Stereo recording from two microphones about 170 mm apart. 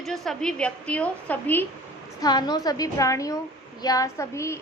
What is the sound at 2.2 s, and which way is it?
A woman's voice, 25° left (ahead or behind).